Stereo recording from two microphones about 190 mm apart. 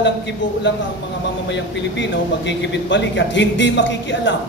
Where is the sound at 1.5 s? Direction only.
65° left (ahead or behind).